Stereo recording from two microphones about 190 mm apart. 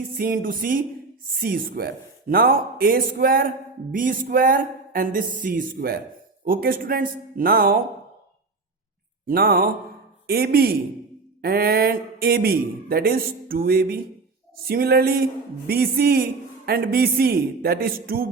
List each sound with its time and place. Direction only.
0.1 s speech: 50° right (ahead or behind)
9.2 s speech: 50° right (ahead or behind)